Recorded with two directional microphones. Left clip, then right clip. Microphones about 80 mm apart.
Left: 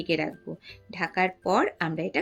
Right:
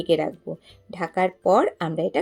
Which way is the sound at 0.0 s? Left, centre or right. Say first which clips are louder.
Right 6 dB; right.